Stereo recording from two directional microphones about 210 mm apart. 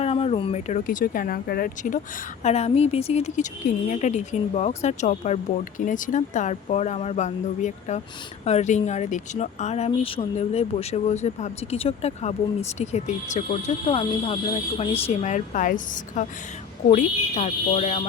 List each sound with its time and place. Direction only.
0.0 s speech: 30° left (ahead or behind)